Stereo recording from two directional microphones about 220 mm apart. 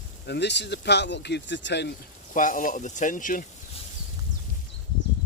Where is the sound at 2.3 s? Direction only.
35° left (ahead or behind).